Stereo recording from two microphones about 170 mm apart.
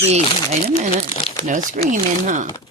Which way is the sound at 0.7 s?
35° left (ahead or behind).